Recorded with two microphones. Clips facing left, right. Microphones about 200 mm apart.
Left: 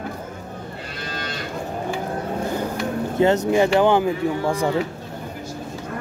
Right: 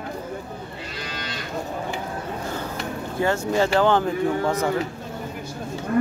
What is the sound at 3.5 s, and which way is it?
Speech, 15° left (ahead or behind).